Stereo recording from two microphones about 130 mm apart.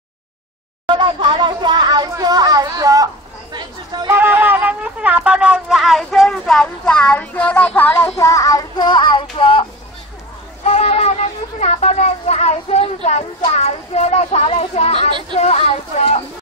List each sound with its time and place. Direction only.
0.8 s a sound: 35° right (ahead or behind)
3.5 s chatter: 35° right (ahead or behind)
4.1 s wind instrument: 15° right (ahead or behind)
6.0 s speech: 5° left (ahead or behind)
8.2 s child singing: 25° left (ahead or behind); by 9.7 s 40° left (ahead or behind)
10.6 s a sound: 55° left (ahead or behind)
11.6 s speech: 55° left (ahead or behind)
15.0 s speech: 40° right (ahead or behind)
15.3 s speech: 55° left (ahead or behind)